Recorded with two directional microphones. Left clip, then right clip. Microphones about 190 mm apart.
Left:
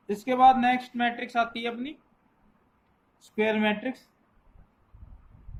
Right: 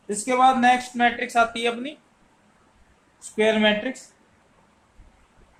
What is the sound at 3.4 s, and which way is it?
Speech, 20° left (ahead or behind).